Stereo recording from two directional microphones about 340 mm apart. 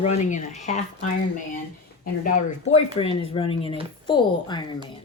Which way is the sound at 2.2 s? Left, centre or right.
Centre.